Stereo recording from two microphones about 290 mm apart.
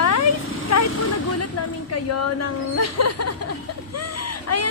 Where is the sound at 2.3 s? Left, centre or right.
Left.